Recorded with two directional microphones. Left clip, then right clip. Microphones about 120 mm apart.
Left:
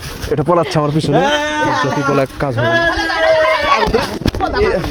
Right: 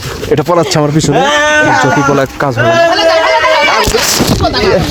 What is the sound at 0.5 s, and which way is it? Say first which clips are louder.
Speech: right 2 dB; 25° right (ahead or behind).